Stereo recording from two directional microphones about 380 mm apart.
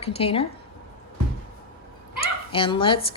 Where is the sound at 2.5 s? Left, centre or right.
Centre.